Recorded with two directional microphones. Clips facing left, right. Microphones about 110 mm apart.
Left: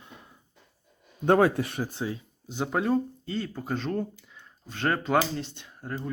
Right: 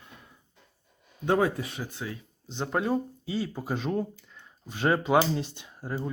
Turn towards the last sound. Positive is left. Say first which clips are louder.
# right 1 dB
turn(degrees=-10)  # may be behind; listen again after turning